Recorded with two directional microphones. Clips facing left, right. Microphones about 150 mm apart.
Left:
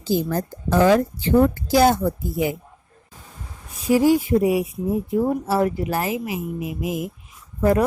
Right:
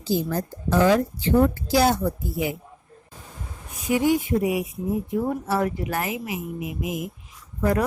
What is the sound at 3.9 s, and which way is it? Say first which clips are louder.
A woman's voice: left 4 dB; 35° left (ahead or behind).